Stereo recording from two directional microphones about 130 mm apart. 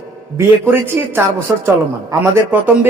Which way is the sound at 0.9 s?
15° right (ahead or behind).